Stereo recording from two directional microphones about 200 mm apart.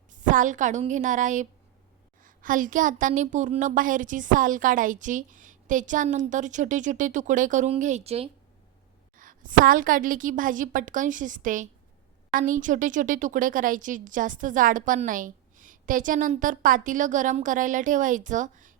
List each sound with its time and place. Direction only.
0.1 s a woman's voice: 40° right (ahead or behind)
9.1 s a woman's voice: 40° right (ahead or behind)